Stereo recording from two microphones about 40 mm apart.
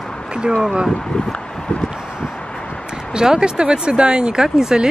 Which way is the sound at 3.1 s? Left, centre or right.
Centre.